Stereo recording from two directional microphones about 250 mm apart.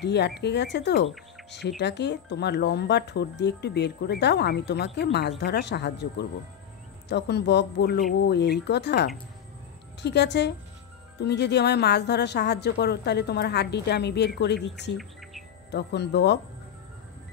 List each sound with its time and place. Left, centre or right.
0.0 s speech: left